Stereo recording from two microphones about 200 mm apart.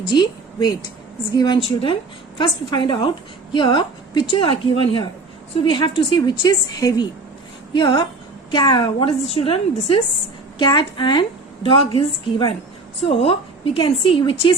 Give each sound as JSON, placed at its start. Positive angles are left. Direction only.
{"t": 0.1, "sound": "a woman's voice", "side_deg": 20}